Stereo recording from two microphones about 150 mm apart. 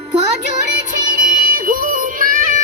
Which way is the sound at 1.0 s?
60° right (ahead or behind).